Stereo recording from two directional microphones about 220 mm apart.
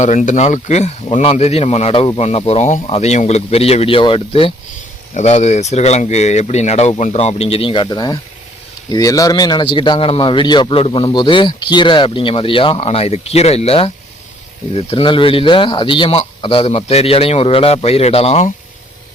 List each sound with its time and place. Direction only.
0.0 s a man's voice: 35° left (ahead or behind)